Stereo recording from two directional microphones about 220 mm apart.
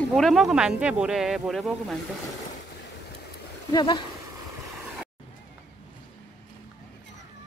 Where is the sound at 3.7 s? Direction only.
20° left (ahead or behind).